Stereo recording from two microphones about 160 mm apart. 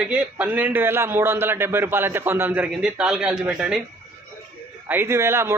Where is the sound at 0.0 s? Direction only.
10° right (ahead or behind).